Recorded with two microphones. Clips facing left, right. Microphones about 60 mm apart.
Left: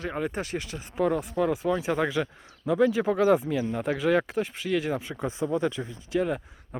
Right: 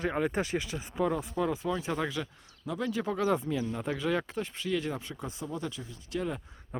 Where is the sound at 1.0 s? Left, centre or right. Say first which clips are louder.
Left 4 dB; left.